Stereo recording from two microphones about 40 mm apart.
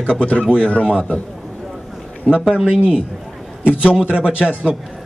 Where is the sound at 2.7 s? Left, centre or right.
Right.